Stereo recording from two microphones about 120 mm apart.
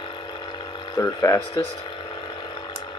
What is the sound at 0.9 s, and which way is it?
Speech, 25° left (ahead or behind).